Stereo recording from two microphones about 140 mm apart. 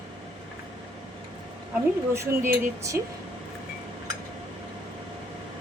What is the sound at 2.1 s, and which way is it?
Speech, 20° right (ahead or behind).